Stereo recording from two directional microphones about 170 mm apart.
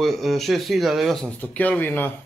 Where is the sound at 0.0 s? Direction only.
Centre (ahead or behind).